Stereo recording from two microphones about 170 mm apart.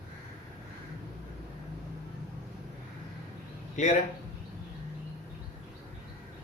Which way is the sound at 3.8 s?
45° left (ahead or behind).